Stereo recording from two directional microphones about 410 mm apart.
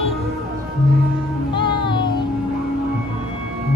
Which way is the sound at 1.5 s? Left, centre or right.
Centre.